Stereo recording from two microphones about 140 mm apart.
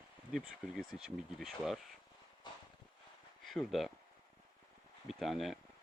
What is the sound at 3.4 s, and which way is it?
Speech, centre (ahead or behind).